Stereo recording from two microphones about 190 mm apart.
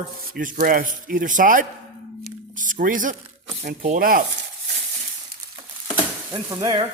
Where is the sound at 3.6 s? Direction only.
40° right (ahead or behind).